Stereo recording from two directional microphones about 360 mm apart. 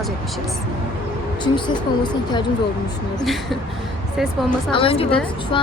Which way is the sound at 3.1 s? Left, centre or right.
Centre.